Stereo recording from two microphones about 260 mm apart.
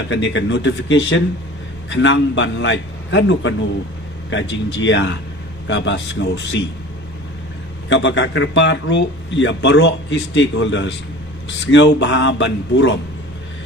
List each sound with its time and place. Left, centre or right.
0.1 s a man's voice: left
7.9 s a man's voice: left